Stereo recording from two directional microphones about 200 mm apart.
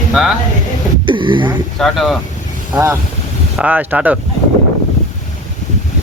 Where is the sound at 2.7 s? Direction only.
15° right (ahead or behind).